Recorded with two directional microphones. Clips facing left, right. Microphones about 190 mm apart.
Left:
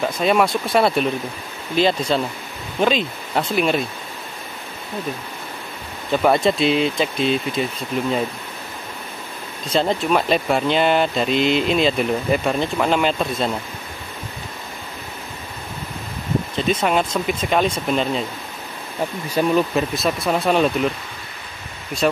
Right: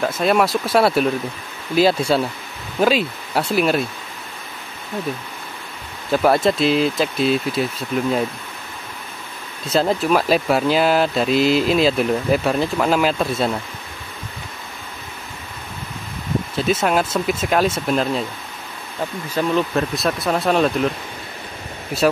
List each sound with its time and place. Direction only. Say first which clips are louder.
0.0 s speech: even; centre (ahead or behind)
6.1 s speech: right 1 dB; centre (ahead or behind)
9.7 s speech: right 1 dB; 5° right (ahead or behind)
16.5 s speech: right 1 dB; 5° right (ahead or behind)
19.3 s speech: left 1 dB; 10° left (ahead or behind)